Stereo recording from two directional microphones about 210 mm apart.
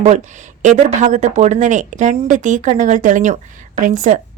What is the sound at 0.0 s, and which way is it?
A woman's voice, 35° right (ahead or behind).